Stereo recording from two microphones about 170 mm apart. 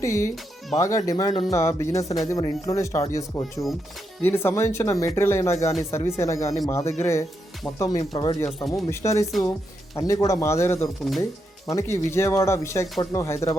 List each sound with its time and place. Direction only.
0.0 s speech: 20° left (ahead or behind)
1.3 s speech: 30° left (ahead or behind)
1.5 s speech: 15° left (ahead or behind)
8.4 s speech: centre (ahead or behind)
8.9 s speech: 15° left (ahead or behind)
10.8 s speech: centre (ahead or behind)
11.7 s speech: 15° left (ahead or behind)